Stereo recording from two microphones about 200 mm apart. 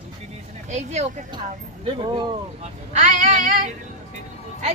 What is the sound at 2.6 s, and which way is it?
Speech, 35° right (ahead or behind).